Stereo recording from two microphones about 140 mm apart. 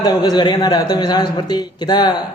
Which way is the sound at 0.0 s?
30° left (ahead or behind).